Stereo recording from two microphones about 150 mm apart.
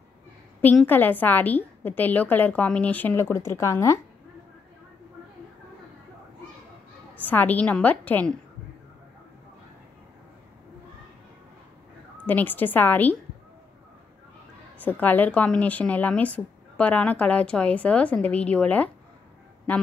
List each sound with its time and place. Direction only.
0.6 s a woman's voice: 10° left (ahead or behind)
7.2 s a woman's voice: 10° left (ahead or behind)
12.3 s a woman's voice: 10° left (ahead or behind)
14.8 s a woman's voice: 10° left (ahead or behind)